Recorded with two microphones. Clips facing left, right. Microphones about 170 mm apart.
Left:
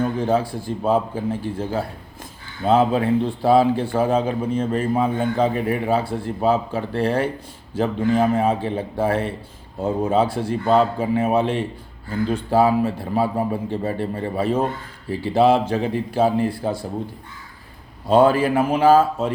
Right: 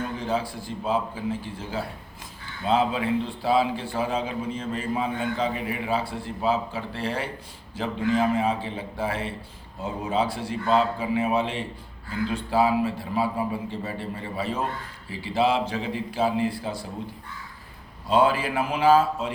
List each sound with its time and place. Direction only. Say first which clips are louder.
0.0 s a man's voice: left 7 dB; 50° left (ahead or behind)
18.1 s a man's voice: left 6 dB; 50° left (ahead or behind)